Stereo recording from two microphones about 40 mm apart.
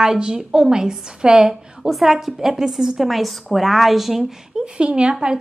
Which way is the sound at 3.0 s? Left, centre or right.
Centre.